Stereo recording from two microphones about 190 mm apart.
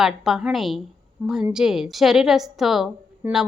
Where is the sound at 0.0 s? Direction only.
Centre (ahead or behind).